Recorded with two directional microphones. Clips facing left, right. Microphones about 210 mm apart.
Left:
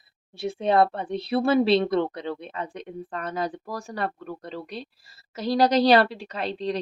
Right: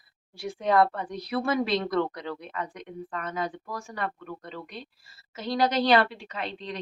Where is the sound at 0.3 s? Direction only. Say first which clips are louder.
Left 2 dB; 25° left (ahead or behind).